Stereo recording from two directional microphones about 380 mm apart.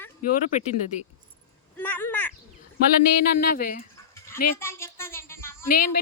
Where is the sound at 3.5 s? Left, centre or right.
Left.